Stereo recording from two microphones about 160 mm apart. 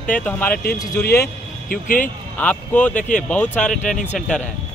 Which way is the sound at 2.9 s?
50° left (ahead or behind).